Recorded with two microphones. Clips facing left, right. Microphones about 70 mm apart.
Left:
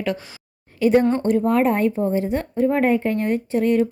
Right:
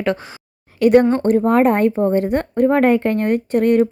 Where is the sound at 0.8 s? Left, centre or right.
Right.